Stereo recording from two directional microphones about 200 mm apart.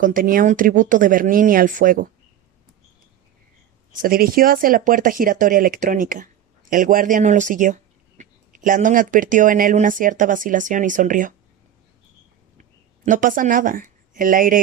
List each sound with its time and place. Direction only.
0.0 s speech: 45° right (ahead or behind)
4.0 s speech: 45° right (ahead or behind)
13.1 s speech: 40° right (ahead or behind)